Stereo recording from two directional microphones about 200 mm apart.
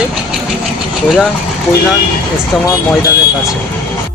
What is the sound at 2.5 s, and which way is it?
Speech, centre (ahead or behind).